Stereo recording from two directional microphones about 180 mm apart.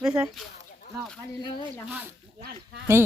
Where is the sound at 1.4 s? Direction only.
25° left (ahead or behind).